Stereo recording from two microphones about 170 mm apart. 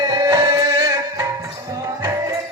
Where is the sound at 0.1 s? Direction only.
20° right (ahead or behind).